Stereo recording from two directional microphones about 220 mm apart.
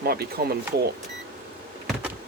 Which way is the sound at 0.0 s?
45° right (ahead or behind).